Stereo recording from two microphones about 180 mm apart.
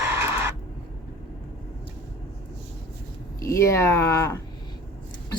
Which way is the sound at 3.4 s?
15° left (ahead or behind).